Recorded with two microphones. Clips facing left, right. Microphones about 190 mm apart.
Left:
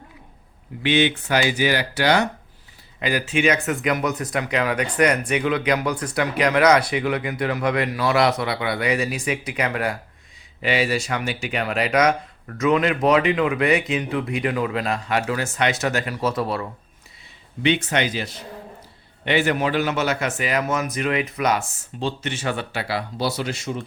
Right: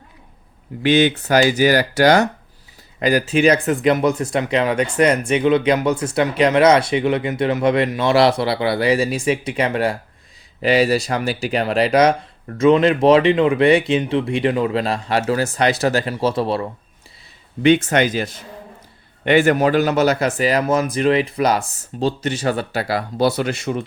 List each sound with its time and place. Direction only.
0.8 s speech: 40° right (ahead or behind)
10.6 s speech: 40° right (ahead or behind)
17.6 s speech: 45° right (ahead or behind)